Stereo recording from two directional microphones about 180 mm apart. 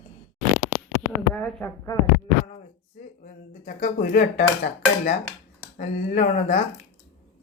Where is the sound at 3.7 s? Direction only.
45° left (ahead or behind).